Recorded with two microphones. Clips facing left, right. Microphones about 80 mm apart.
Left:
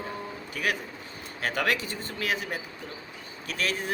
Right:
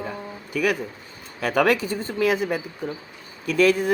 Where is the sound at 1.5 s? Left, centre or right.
Right.